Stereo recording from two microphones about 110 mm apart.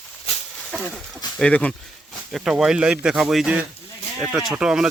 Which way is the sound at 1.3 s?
10° left (ahead or behind).